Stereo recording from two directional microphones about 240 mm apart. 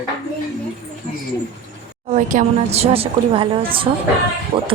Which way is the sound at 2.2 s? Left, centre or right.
Right.